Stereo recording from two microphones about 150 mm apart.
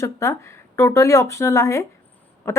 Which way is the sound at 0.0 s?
20° left (ahead or behind).